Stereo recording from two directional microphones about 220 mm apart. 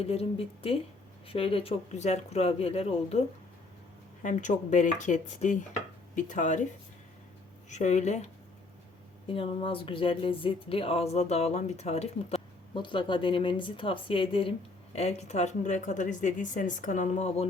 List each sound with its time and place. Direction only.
0.0 s speech: 25° left (ahead or behind)
7.7 s speech: 35° left (ahead or behind)